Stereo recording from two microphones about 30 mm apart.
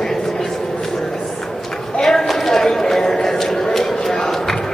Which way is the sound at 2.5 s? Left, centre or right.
Centre.